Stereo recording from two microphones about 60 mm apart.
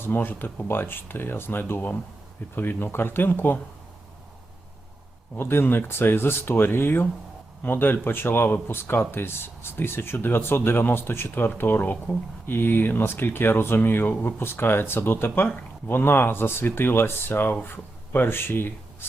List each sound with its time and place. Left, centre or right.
0.0 s speech: left
5.4 s speech: left